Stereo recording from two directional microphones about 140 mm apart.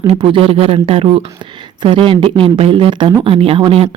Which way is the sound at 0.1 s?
40° right (ahead or behind).